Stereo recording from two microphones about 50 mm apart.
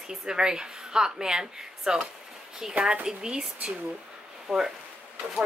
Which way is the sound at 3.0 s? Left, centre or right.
Centre.